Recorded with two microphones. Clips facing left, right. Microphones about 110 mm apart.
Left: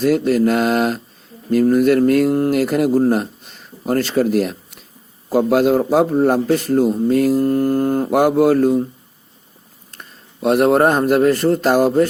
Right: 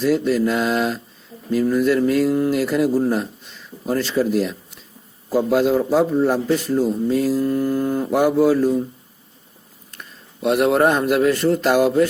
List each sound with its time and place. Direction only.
0.0 s mantra: 55° left (ahead or behind)
1.5 s speech: 55° left (ahead or behind)
9.9 s speech: 40° left (ahead or behind)